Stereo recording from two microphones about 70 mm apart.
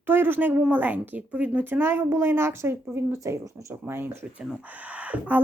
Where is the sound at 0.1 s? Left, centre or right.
Right.